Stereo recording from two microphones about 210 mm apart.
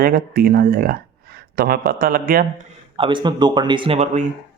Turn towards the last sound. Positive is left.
turn(degrees=-35)  # may be behind; listen again after turning